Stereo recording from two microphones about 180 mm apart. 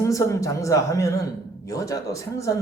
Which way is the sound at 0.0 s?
15° left (ahead or behind).